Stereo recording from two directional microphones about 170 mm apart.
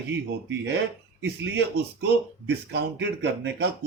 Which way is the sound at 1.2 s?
85° right.